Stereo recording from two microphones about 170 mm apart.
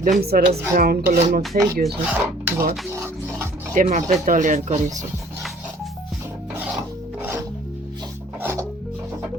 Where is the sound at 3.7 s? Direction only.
50° right (ahead or behind).